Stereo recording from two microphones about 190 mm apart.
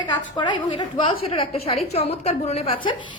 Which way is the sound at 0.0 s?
25° left (ahead or behind).